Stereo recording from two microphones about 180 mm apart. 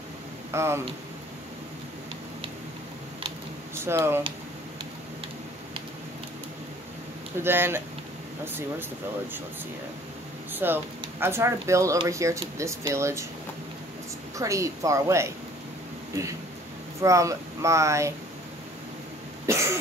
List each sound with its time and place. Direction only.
0.5 s speech: 15° right (ahead or behind)
3.7 s speech: 15° right (ahead or behind)
7.4 s speech: 10° right (ahead or behind)
10.5 s a sound: 10° right (ahead or behind)
11.1 s speech: 15° right (ahead or behind)
14.4 s speech: 15° right (ahead or behind)
19.4 s cough: 15° right (ahead or behind)